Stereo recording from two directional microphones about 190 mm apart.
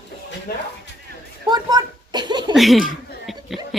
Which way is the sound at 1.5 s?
20° right (ahead or behind).